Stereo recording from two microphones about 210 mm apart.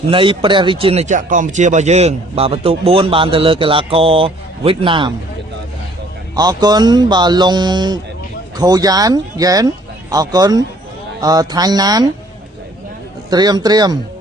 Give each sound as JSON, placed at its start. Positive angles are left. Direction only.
{"t": 0.1, "sound": "speech", "side_deg": -25}
{"t": 6.3, "sound": "speech", "side_deg": -20}
{"t": 13.3, "sound": "speech", "side_deg": -20}